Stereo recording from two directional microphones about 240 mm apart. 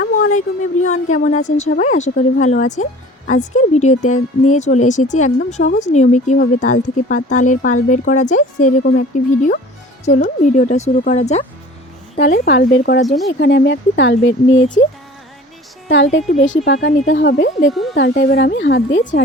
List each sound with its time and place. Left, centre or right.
0.0 s speech: left
16.4 s speech: left
16.7 s speech: left